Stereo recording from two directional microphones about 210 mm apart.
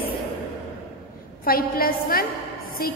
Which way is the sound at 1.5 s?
45° left (ahead or behind).